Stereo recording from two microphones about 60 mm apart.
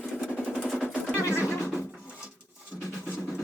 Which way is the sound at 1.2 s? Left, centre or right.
Left.